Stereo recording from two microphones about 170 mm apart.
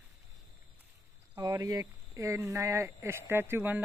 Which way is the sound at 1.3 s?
20° right (ahead or behind).